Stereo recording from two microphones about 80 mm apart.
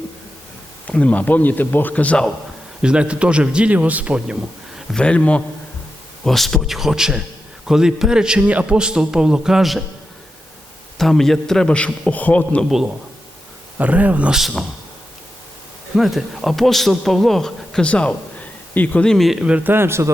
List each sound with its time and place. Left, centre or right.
0.9 s a man's voice: centre
2.8 s a man's voice: centre
4.9 s a man's voice: centre
6.2 s a man's voice: centre
10.9 s a man's voice: centre
13.7 s speech: centre
14.3 s speech: centre
16.0 s a man's voice: centre
19.0 s speech: centre
19.5 s speech: right